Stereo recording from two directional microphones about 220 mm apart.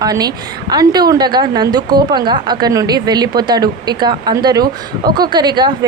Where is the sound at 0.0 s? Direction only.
15° right (ahead or behind).